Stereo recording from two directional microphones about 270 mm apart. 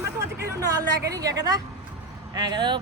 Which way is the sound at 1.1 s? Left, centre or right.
Centre.